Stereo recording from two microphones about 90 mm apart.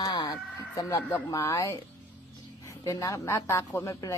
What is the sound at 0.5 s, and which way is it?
Speech, 30° left (ahead or behind).